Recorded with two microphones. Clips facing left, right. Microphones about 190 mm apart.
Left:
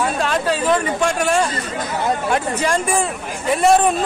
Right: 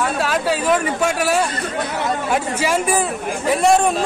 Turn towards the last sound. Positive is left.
turn(degrees=0)  # may be behind; listen again after turning